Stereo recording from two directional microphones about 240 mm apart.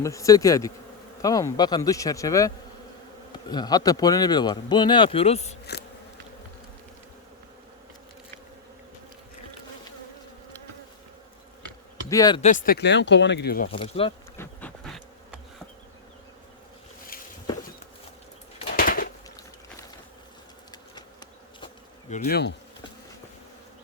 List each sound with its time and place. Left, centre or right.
0.0 s speech: centre
11.6 s insect: centre
12.4 s speech: left
13.7 s speech: left
14.3 s bee: centre
18.8 s a sound: left
20.9 s bee: centre
22.1 s bee: left